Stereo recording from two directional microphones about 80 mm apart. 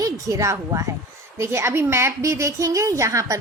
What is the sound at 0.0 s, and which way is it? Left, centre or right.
A woman's voice, right.